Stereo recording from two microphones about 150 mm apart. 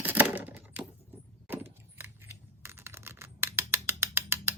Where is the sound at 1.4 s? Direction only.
15° right (ahead or behind).